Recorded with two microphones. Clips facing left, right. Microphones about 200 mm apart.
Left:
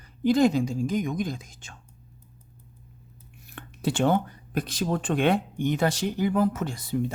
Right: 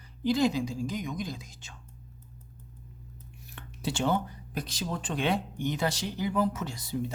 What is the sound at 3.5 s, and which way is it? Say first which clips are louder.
Speech: left 6 dB; 55° left (ahead or behind).